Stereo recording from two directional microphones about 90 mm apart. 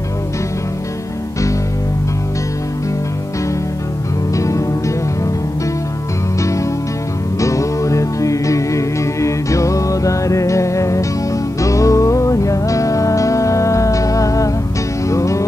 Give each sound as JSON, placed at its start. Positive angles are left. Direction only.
{"t": 4.4, "sound": "music", "side_deg": 35}
{"t": 7.3, "sound": "music", "side_deg": 35}